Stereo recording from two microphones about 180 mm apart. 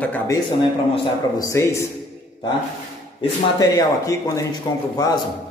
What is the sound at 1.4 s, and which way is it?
Speech, 15° left (ahead or behind).